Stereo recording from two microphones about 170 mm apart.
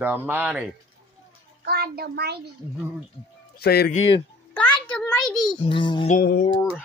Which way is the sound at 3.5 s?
65° left (ahead or behind).